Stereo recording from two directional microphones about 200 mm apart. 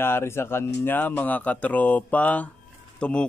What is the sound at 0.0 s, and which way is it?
A man's voice, 10° left (ahead or behind).